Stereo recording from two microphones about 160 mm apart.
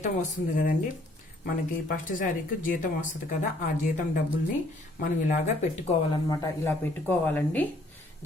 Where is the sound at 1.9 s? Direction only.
60° left (ahead or behind).